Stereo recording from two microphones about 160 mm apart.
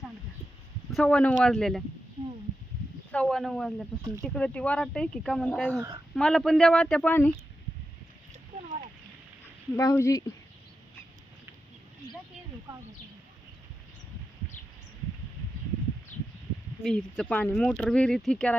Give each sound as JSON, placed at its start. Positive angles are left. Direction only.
{"t": 0.9, "sound": "speech", "side_deg": 5}
{"t": 3.1, "sound": "speech", "side_deg": 5}
{"t": 9.7, "sound": "speech", "side_deg": 20}
{"t": 16.8, "sound": "speech", "side_deg": 5}